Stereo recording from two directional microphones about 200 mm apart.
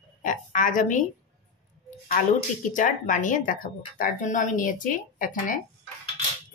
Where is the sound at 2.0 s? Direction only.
40° left (ahead or behind).